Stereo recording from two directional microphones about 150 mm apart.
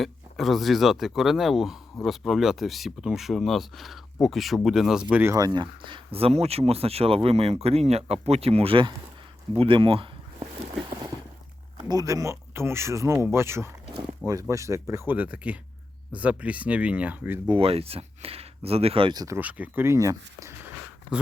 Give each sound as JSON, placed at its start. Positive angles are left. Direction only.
{"t": 0.0, "sound": "speech", "side_deg": 0}
{"t": 5.5, "sound": "speech", "side_deg": -30}
{"t": 9.6, "sound": "a sound", "side_deg": -35}
{"t": 11.8, "sound": "speech", "side_deg": -25}
{"t": 17.5, "sound": "speech", "side_deg": -40}
{"t": 19.4, "sound": "speech", "side_deg": -10}